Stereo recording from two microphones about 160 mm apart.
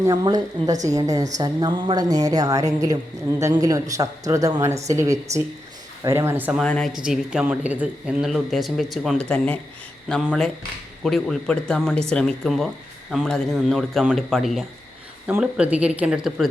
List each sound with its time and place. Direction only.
0.0 s a woman's voice: 25° right (ahead or behind)
6.6 s speech: 5° left (ahead or behind)